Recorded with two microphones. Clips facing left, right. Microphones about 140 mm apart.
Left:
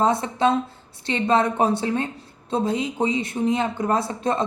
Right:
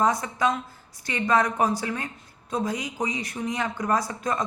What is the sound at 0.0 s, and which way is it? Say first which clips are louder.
A woman's voice: left 3 dB; 25° left (ahead or behind).